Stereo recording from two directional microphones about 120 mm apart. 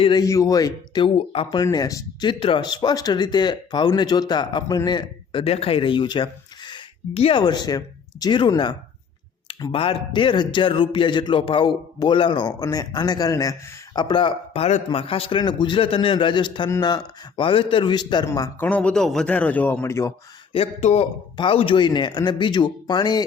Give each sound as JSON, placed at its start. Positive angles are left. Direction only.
{"t": 0.0, "sound": "a man's voice", "side_deg": 40}
{"t": 0.3, "sound": "speech", "side_deg": 25}
{"t": 1.0, "sound": "a man's voice", "side_deg": 50}
{"t": 1.5, "sound": "a man's voice", "side_deg": 35}
{"t": 2.4, "sound": "a man's voice", "side_deg": 45}
{"t": 9.7, "sound": "a man's voice", "side_deg": 50}
{"t": 18.6, "sound": "a man's voice", "side_deg": 10}
{"t": 20.5, "sound": "speech", "side_deg": 55}
{"t": 21.3, "sound": "a man's voice", "side_deg": 45}